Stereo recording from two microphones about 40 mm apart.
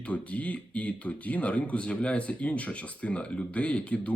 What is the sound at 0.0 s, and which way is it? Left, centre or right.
Speech, left.